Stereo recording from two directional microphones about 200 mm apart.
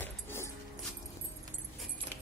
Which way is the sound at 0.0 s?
10° left (ahead or behind).